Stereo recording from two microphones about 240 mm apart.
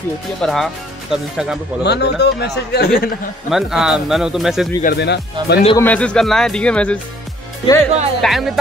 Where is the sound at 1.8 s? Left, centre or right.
Left.